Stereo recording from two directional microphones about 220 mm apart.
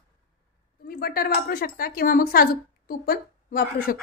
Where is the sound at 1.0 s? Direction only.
45° left (ahead or behind).